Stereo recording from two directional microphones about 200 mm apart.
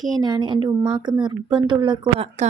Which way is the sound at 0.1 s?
20° right (ahead or behind).